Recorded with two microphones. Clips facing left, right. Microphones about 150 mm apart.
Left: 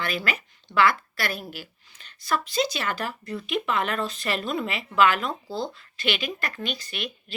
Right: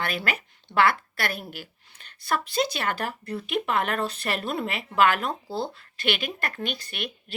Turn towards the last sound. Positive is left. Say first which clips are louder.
# even
turn(degrees=-55)  # may be behind; listen again after turning